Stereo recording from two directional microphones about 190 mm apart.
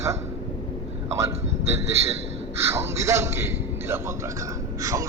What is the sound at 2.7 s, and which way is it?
A man's voice, 15° right (ahead or behind).